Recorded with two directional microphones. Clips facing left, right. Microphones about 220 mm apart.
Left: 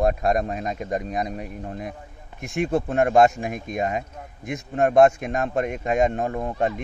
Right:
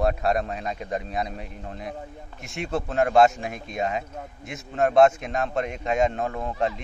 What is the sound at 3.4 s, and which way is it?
A man's voice, 50° left (ahead or behind).